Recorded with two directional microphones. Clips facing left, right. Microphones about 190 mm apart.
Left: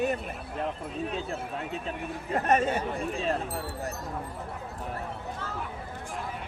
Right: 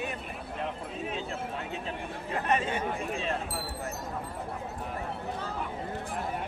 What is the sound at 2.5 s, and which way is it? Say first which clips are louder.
Speech: left 3 dB; 40° left (ahead or behind).